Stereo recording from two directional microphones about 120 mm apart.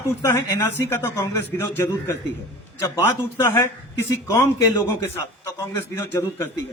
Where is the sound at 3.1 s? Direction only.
20° left (ahead or behind).